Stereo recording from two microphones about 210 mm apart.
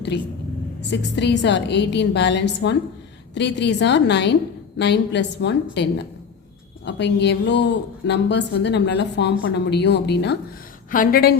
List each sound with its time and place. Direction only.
0.1 s speech: 55° left (ahead or behind)
10.9 s a woman's voice: 45° left (ahead or behind)